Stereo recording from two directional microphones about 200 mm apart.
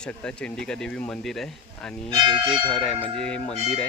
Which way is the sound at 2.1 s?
20° right (ahead or behind).